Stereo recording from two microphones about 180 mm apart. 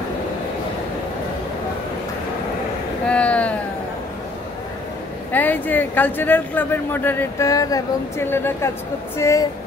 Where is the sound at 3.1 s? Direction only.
5° left (ahead or behind).